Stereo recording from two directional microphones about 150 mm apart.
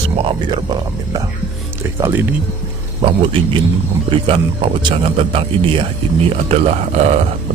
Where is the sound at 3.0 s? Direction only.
35° right (ahead or behind).